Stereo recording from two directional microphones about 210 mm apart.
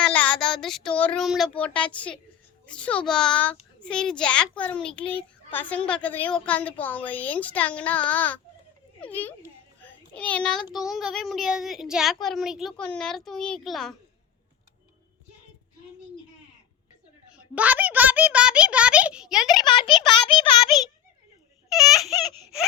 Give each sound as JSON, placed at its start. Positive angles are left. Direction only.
{"t": 0.0, "sound": "a child's voice", "side_deg": 5}
{"t": 9.8, "sound": "a sound", "side_deg": 5}
{"t": 10.8, "sound": "a child's voice", "side_deg": 0}
{"t": 17.3, "sound": "a child's voice", "side_deg": -5}
{"t": 19.6, "sound": "a child's voice", "side_deg": 25}
{"t": 21.7, "sound": "speech", "side_deg": 0}